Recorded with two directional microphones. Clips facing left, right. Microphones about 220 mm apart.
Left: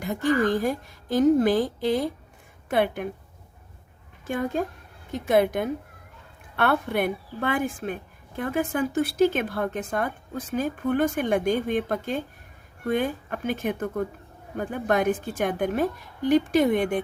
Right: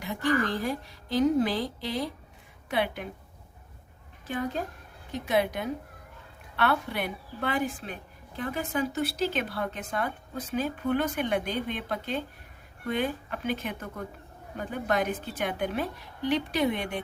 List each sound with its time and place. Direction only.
0.0 s a woman's voice: 45° left (ahead or behind)
4.3 s a woman's voice: 50° left (ahead or behind)